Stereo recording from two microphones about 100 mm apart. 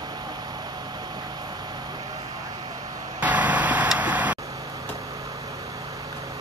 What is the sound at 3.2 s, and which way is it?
Vehicle, 15° right (ahead or behind).